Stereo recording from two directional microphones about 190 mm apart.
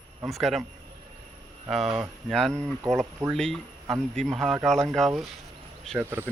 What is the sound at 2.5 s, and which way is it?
Speech, 15° right (ahead or behind).